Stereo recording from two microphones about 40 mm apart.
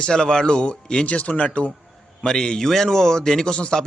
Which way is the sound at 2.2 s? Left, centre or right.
Centre.